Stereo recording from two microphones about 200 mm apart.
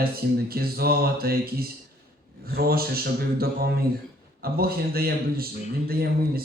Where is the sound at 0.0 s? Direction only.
50° right (ahead or behind).